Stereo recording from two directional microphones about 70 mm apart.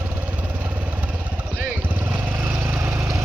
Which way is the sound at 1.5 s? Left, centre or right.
Right.